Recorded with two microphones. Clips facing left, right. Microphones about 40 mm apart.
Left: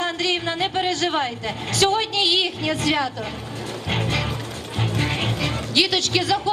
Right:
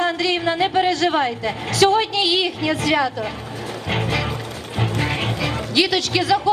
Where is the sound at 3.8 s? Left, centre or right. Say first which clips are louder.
Right 2 dB; right.